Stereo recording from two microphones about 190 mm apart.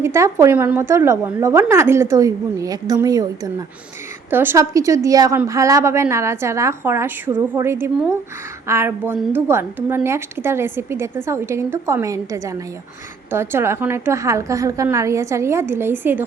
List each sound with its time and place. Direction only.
0.0 s a woman's voice: 15° right (ahead or behind)